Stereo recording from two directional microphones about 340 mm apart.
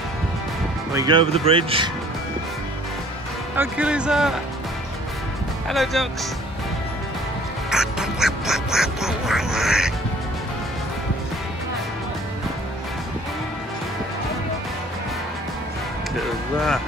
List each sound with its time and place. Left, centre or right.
0.9 s speech: centre
3.5 s speech: centre
5.7 s speech: centre
7.7 s quack: centre
16.2 s speech: centre